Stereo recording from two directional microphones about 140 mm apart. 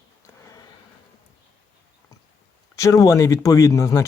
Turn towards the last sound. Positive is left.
turn(degrees=20)  # may be behind; listen again after turning